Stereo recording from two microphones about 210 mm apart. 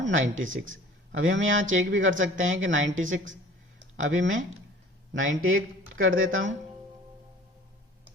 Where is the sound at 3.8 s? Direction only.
65° right (ahead or behind).